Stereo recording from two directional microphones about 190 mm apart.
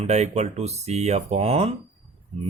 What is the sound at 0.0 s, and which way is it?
Speech, 35° right (ahead or behind).